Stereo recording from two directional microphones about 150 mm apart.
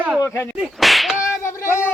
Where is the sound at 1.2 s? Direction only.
15° left (ahead or behind).